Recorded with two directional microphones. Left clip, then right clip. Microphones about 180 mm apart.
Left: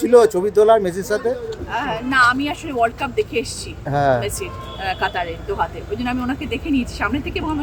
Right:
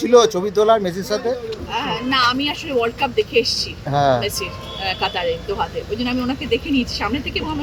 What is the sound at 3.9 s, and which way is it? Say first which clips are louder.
Speech: even; 20° left (ahead or behind).